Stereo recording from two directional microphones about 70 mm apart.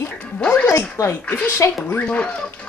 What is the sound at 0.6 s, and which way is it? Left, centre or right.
Speech, left.